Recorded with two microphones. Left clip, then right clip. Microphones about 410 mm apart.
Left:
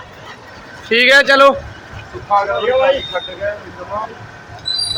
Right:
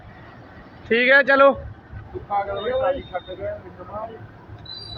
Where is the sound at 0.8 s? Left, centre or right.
Right.